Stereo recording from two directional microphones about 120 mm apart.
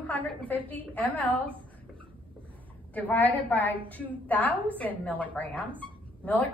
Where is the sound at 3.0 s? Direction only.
15° left (ahead or behind).